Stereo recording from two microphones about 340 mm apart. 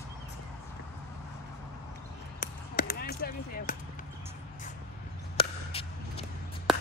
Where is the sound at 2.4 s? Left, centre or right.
Left.